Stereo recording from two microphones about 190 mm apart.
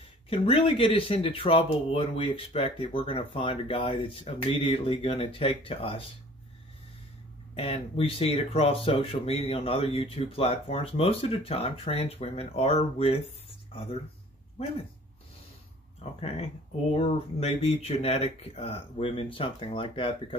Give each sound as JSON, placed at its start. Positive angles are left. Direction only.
{"t": 0.3, "sound": "speech", "side_deg": 30}
{"t": 7.5, "sound": "speech", "side_deg": 30}
{"t": 16.0, "sound": "speech", "side_deg": 30}